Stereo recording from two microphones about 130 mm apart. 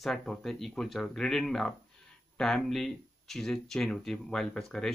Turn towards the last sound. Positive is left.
turn(degrees=5)  # may be behind; listen again after turning